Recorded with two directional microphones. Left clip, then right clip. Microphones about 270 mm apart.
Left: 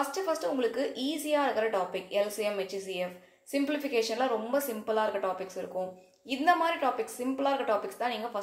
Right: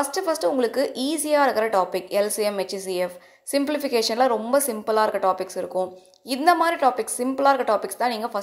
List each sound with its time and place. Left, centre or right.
0.0 s a woman's voice: right